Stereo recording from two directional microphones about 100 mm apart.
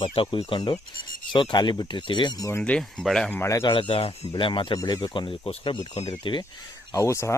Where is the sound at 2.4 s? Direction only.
25° left (ahead or behind).